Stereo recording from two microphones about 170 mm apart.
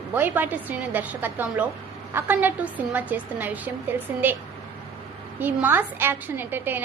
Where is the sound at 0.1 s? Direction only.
10° right (ahead or behind).